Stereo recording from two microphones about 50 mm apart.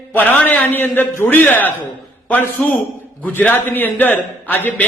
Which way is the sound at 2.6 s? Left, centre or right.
Left.